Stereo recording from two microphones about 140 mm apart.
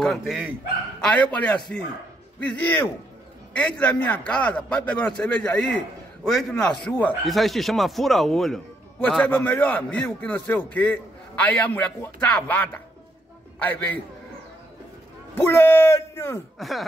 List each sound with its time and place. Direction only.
0.0 s speech: centre (ahead or behind)
1.0 s a man's voice: 10° left (ahead or behind)
7.2 s a man's voice: centre (ahead or behind)
15.3 s a man's voice: 15° left (ahead or behind)
16.5 s speech: centre (ahead or behind)